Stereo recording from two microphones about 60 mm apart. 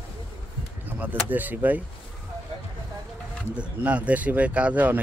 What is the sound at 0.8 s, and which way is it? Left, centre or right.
Speech, right.